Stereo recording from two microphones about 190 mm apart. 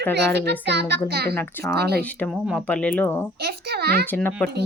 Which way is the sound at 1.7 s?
60° right (ahead or behind).